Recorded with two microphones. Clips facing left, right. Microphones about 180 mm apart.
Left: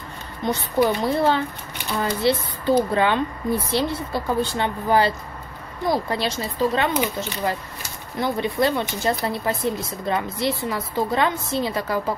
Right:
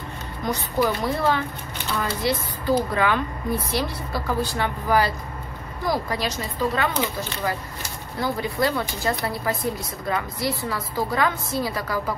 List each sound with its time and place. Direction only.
0.5 s speech: 30° left (ahead or behind)